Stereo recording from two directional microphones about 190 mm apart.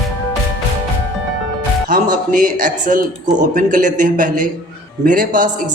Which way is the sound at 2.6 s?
45° right (ahead or behind).